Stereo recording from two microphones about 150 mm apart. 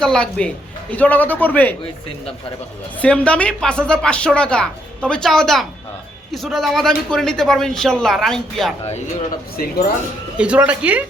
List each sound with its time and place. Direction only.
0.0 s speech: 5° left (ahead or behind)
3.0 s a man's voice: 10° left (ahead or behind)
9.6 s speech: 75° left (ahead or behind)
10.3 s speech: 10° right (ahead or behind)